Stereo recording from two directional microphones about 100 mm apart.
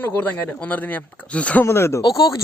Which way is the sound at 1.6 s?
25° left (ahead or behind).